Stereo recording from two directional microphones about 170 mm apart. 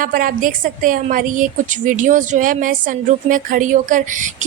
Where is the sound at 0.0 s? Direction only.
55° right (ahead or behind).